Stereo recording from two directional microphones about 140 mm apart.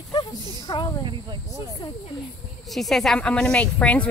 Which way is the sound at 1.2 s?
25° right (ahead or behind).